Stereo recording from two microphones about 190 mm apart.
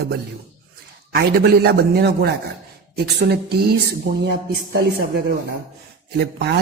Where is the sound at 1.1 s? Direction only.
55° right (ahead or behind).